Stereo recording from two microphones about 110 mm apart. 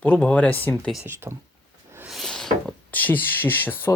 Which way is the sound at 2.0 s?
Centre (ahead or behind).